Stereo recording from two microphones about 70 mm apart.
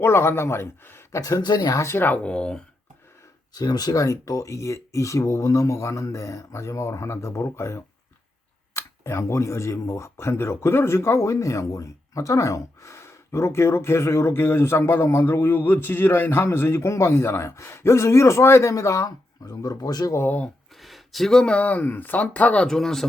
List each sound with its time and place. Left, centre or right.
0.0 s speech: left
1.4 s speech: left
1.7 s speech: left
2.0 s speech: left
3.5 s speech: left
20.1 s speech: left
20.8 s speech: centre; by 22.6 s left
22.6 s speech: centre